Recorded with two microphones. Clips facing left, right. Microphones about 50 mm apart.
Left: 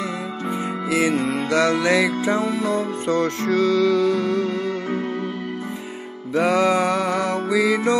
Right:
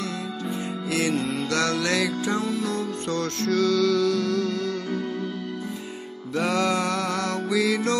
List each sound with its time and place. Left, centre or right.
0.8 s music: centre
6.3 s music: centre